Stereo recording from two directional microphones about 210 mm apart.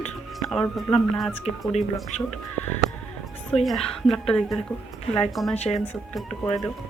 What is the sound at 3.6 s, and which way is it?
Speech, centre (ahead or behind).